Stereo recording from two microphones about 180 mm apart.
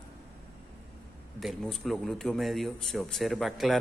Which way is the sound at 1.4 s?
Centre (ahead or behind).